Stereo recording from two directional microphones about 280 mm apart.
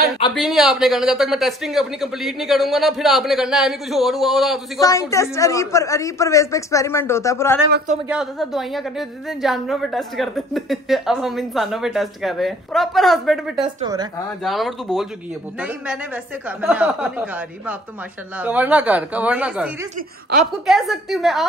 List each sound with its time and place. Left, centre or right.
0.3 s a woman's voice: centre
4.7 s speech: centre
8.1 s a woman's voice: centre
16.4 s a woman's voice: centre